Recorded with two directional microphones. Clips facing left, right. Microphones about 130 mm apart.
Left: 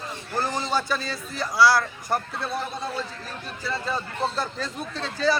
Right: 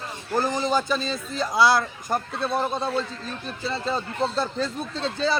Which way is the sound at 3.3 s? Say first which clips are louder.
Right 2 dB; 25° right (ahead or behind).